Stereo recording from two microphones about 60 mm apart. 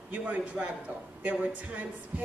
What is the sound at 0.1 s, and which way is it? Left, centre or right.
Speech, right.